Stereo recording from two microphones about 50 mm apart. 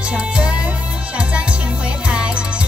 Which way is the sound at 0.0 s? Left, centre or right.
Right.